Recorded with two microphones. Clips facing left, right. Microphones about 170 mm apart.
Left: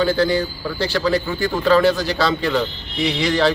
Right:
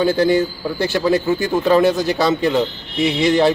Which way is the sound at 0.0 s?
20° right (ahead or behind).